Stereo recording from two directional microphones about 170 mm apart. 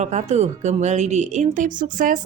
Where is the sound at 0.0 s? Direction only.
40° right (ahead or behind).